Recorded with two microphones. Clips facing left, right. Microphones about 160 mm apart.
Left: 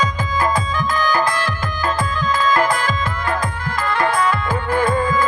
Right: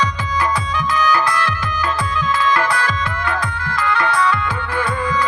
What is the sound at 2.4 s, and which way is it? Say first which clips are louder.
Music: left 2 dB; 45° left (ahead or behind).